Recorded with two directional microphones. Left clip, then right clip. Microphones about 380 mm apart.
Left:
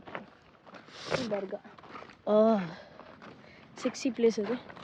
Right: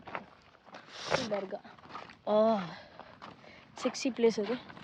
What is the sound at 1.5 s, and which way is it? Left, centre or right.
Speech, right.